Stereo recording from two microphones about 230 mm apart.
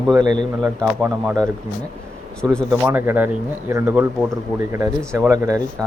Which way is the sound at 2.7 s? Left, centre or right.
Centre.